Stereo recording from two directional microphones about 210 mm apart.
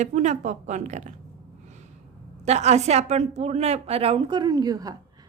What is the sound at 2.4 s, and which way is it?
A woman's voice, 30° right (ahead or behind).